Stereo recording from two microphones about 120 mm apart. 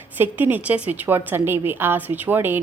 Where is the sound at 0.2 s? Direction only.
15° right (ahead or behind).